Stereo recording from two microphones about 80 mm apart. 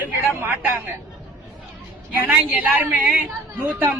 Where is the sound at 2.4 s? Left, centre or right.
Right.